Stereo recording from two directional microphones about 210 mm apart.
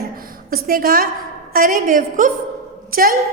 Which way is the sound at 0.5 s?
45° right (ahead or behind).